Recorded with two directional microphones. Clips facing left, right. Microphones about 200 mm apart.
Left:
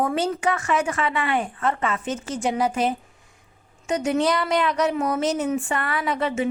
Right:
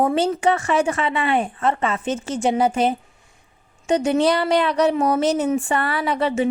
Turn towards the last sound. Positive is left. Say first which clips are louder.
# right 3 dB
turn(degrees=-35)  # may be behind; listen again after turning